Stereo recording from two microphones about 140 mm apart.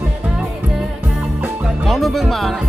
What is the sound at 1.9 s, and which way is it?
Speech, centre (ahead or behind).